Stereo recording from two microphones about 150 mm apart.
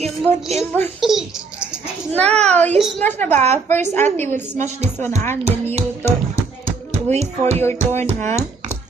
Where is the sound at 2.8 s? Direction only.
Centre (ahead or behind).